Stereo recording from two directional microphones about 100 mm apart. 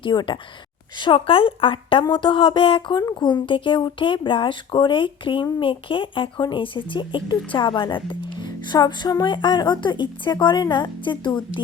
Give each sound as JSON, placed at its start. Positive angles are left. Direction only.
{"t": 0.0, "sound": "speech", "side_deg": 50}